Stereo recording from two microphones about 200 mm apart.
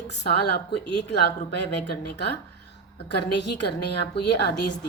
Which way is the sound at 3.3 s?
60° left (ahead or behind).